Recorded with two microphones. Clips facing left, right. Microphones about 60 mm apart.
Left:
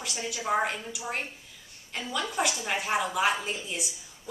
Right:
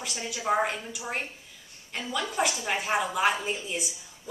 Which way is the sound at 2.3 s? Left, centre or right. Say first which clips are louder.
Right 2 dB; centre.